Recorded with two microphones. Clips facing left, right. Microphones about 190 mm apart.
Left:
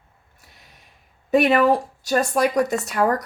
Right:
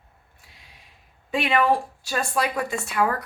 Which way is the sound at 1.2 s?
45° left (ahead or behind).